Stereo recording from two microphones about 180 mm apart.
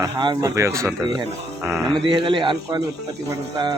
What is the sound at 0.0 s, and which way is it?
Speech, 20° right (ahead or behind).